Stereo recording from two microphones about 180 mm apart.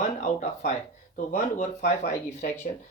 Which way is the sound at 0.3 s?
45° left (ahead or behind).